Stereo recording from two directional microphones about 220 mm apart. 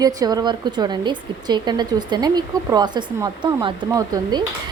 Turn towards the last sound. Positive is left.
turn(degrees=-20)  # may be behind; listen again after turning